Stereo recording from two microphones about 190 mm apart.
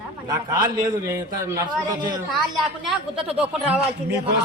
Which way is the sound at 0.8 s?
15° right (ahead or behind).